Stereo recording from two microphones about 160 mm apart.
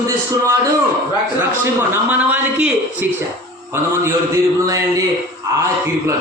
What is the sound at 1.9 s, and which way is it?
A man's voice, 10° right (ahead or behind).